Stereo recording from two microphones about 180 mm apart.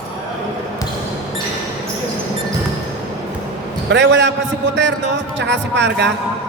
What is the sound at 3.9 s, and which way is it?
Speech, 80° right.